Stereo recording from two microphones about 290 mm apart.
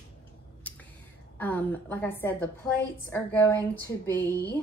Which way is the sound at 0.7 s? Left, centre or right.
Centre.